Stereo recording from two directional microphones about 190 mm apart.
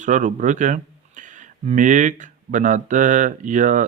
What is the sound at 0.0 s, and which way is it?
Speech, 40° right (ahead or behind).